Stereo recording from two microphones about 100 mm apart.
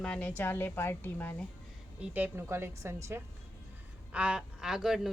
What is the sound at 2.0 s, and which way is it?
A woman's voice, 20° right (ahead or behind).